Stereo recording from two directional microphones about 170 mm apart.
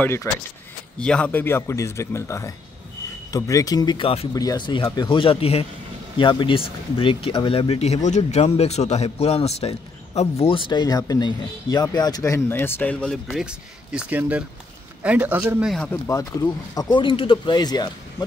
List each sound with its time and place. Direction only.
0.0 s a man's voice: 15° left (ahead or behind); by 4.3 s 35° left (ahead or behind)
4.3 s a man's voice: 20° left (ahead or behind); by 15.7 s 10° right (ahead or behind)
15.7 s a man's voice: 5° left (ahead or behind)
16.1 s speech: 20° left (ahead or behind)